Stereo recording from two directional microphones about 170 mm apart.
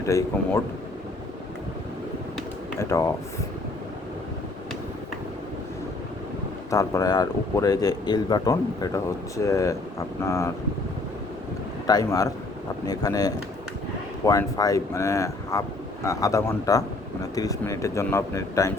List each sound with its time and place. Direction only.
0.0 s speech: 20° left (ahead or behind)
2.7 s speech: 15° left (ahead or behind)
6.7 s speech: 20° left (ahead or behind)
11.9 s speech: 20° left (ahead or behind)